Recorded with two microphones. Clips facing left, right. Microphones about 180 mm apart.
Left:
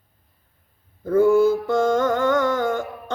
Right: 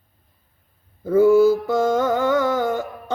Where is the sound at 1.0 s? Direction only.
5° right (ahead or behind).